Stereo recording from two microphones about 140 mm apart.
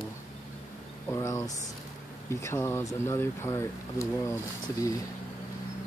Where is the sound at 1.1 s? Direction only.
20° left (ahead or behind).